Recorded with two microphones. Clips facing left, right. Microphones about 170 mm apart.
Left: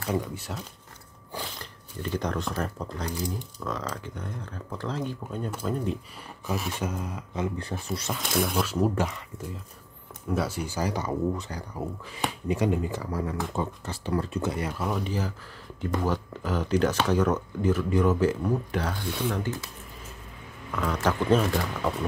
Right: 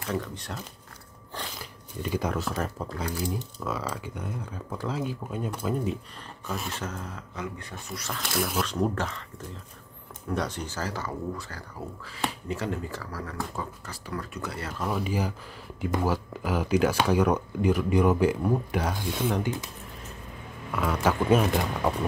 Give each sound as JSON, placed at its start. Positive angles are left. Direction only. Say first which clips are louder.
{"t": 0.1, "sound": "speech", "louder": "left 2 dB", "side_deg": 10}
{"t": 1.6, "sound": "speech", "louder": "right 1 dB", "side_deg": -10}
{"t": 6.7, "sound": "speech", "louder": "left 4 dB", "side_deg": 15}
{"t": 8.2, "sound": "speech", "louder": "left 1 dB", "side_deg": 0}
{"t": 14.9, "sound": "speech", "louder": "right 1 dB", "side_deg": -5}
{"t": 20.7, "sound": "speech", "louder": "right 1 dB", "side_deg": -10}